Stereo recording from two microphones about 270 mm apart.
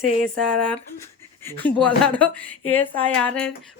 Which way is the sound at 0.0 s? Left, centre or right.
Right.